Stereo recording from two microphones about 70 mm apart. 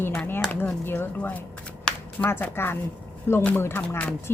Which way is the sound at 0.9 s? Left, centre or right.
Left.